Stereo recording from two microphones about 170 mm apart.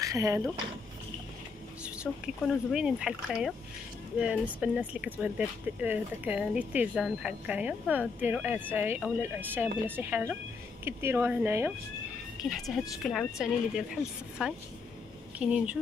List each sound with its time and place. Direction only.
0.0 s speech: 20° right (ahead or behind)
2.2 s speech: 5° right (ahead or behind)
12.4 s speech: centre (ahead or behind)
15.3 s speech: 5° right (ahead or behind)